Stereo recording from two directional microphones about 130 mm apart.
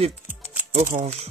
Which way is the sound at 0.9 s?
90° right.